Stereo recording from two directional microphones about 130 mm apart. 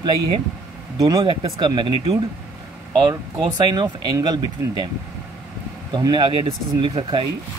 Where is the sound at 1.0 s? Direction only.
35° right (ahead or behind).